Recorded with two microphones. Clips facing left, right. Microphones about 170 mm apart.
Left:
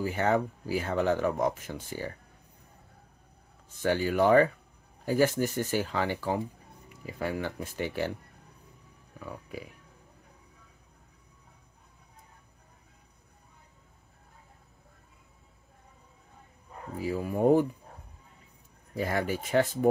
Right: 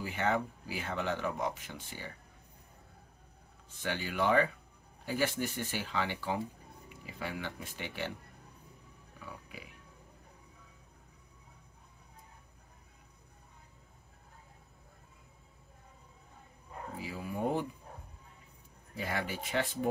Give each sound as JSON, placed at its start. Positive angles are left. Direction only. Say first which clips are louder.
{"t": 0.0, "sound": "speech", "louder": "left 6 dB", "side_deg": 40}
{"t": 3.7, "sound": "speech", "louder": "left 9 dB", "side_deg": 40}
{"t": 9.2, "sound": "speech", "louder": "left 8 dB", "side_deg": 45}
{"t": 17.0, "sound": "speech", "louder": "left 10 dB", "side_deg": 45}
{"t": 18.9, "sound": "speech", "louder": "left 7 dB", "side_deg": 45}